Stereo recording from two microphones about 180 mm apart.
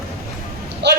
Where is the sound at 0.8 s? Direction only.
70° right (ahead or behind).